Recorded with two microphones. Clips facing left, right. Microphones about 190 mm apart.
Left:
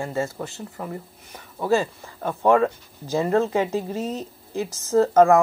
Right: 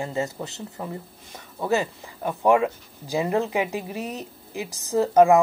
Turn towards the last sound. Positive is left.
turn(degrees=-15)  # may be behind; listen again after turning